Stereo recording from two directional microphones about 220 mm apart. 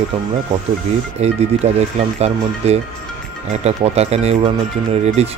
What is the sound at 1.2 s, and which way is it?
Speech, 30° right (ahead or behind).